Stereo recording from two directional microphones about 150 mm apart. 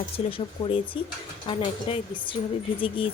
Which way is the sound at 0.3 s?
35° left (ahead or behind).